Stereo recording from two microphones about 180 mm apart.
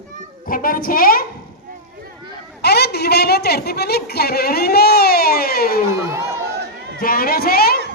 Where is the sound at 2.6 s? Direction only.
65° left (ahead or behind).